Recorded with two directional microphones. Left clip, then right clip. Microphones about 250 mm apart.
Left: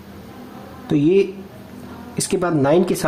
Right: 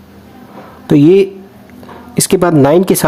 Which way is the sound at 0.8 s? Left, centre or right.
Right.